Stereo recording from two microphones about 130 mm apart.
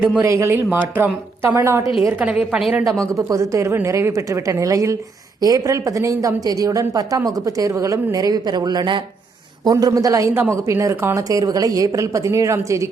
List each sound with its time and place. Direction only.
0.0 s a woman's voice: 10° right (ahead or behind)
0.3 s a woman's voice: 20° right (ahead or behind); by 2.8 s 5° right (ahead or behind)
3.1 s speech: 25° right (ahead or behind)